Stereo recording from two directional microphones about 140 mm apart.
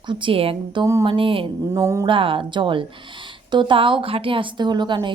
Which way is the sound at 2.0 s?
40° right (ahead or behind).